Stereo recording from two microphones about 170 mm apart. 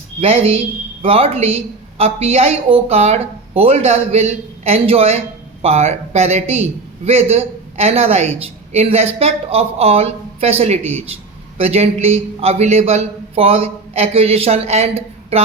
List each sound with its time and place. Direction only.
0.2 s speech: 35° right (ahead or behind)